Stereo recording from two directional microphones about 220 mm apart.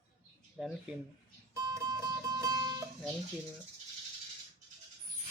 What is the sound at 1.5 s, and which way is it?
Music, 15° right (ahead or behind).